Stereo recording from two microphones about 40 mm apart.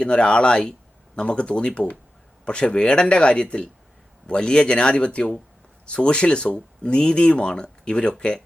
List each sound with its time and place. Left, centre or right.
0.0 s speech: left